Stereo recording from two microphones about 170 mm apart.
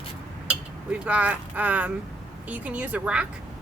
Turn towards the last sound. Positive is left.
turn(degrees=-5)  # may be behind; listen again after turning